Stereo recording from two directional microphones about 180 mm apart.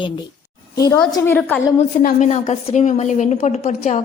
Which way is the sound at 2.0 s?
45° left (ahead or behind).